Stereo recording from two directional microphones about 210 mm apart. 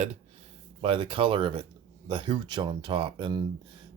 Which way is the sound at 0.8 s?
25° right (ahead or behind).